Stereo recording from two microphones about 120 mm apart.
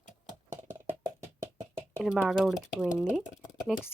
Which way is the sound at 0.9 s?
20° right (ahead or behind).